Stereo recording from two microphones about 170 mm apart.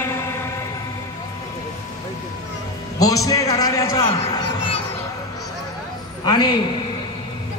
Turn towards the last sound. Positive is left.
turn(degrees=25)  # may be behind; listen again after turning